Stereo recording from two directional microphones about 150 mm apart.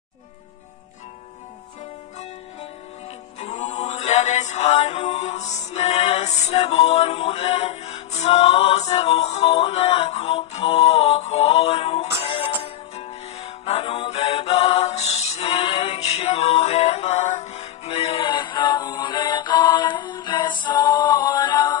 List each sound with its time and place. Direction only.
3.3 s music: 50° left (ahead or behind); by 21.7 s 25° left (ahead or behind)